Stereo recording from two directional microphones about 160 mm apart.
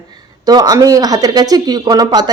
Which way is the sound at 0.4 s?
25° right (ahead or behind).